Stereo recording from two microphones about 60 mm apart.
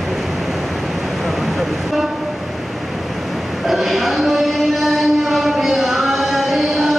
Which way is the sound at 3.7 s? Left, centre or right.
Centre.